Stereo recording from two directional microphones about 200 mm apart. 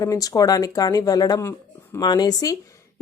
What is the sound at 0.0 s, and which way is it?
A woman's voice, 20° left (ahead or behind).